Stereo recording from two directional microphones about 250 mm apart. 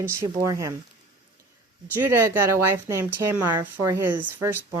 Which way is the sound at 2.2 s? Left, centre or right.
Centre.